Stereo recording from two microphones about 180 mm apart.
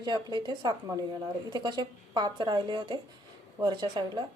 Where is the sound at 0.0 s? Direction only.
25° right (ahead or behind).